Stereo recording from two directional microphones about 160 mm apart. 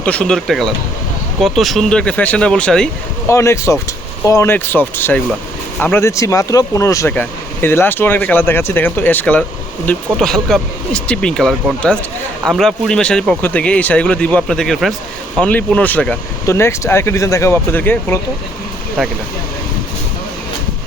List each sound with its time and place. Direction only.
0.0 s speech: 5° left (ahead or behind)
3.2 s speech: 15° left (ahead or behind)
19.0 s speech: centre (ahead or behind)